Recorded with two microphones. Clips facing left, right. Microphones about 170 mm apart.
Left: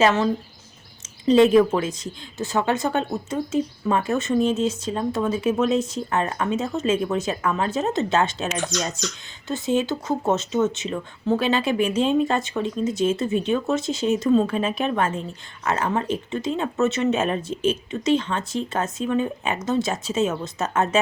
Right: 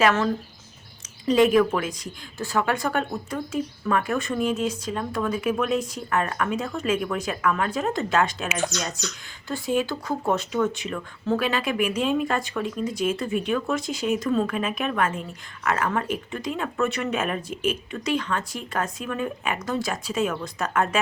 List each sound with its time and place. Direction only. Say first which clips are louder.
0.0 s speech: left 2 dB; 20° left (ahead or behind)
1.3 s speech: left 3 dB; 30° left (ahead or behind)
9.5 s speech: left 2 dB; 20° left (ahead or behind)